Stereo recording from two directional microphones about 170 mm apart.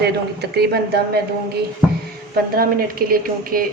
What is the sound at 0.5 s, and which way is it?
Speech, 70° right (ahead or behind).